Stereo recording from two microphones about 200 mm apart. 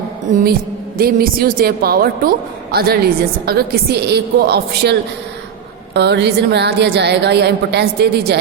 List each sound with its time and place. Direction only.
0.3 s music: 40° right (ahead or behind)
0.9 s a woman's voice: 50° right (ahead or behind)